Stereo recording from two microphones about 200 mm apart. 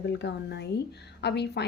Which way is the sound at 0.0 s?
60° left (ahead or behind).